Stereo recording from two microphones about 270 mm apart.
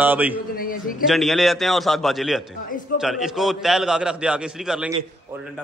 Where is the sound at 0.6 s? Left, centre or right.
Left.